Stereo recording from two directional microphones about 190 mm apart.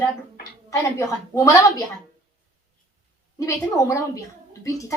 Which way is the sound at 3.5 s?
15° left (ahead or behind).